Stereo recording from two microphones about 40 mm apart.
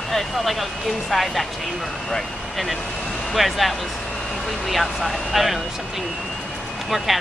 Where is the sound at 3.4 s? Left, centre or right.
Centre.